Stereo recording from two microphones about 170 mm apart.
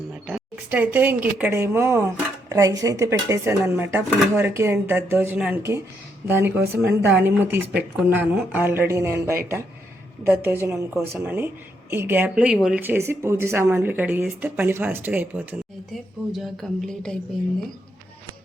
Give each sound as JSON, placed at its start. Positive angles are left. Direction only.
{"t": 0.7, "sound": "speech", "side_deg": -10}
{"t": 16.3, "sound": "speech", "side_deg": 0}